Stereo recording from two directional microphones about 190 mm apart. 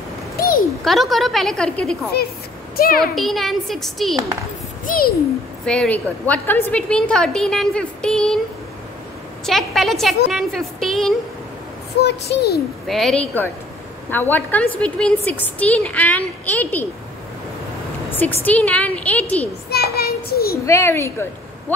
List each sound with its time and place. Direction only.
0.8 s a woman's voice: centre (ahead or behind)
2.8 s a child's voice: 50° left (ahead or behind)
3.2 s a woman's voice: centre (ahead or behind)
4.8 s a child's voice: 50° left (ahead or behind)
5.7 s a woman's voice: 5° left (ahead or behind)
9.5 s a woman's voice: centre (ahead or behind)
12.0 s a child's voice: 60° left (ahead or behind)
12.8 s a woman's voice: centre (ahead or behind)
18.1 s a woman's voice: 10° left (ahead or behind)
19.7 s a sound: 55° left (ahead or behind)
20.6 s speech: 15° left (ahead or behind)